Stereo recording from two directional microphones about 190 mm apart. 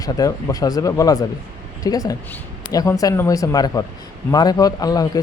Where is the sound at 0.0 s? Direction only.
20° left (ahead or behind).